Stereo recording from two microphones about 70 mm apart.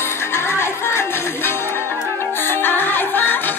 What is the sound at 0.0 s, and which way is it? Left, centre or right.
Music, left.